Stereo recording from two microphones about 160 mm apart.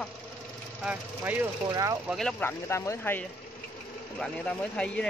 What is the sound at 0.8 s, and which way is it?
Speech, 10° right (ahead or behind).